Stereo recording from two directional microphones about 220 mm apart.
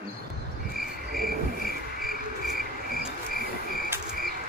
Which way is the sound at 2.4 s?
40° left (ahead or behind).